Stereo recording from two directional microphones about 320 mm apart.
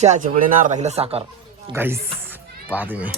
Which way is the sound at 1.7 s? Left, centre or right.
Centre.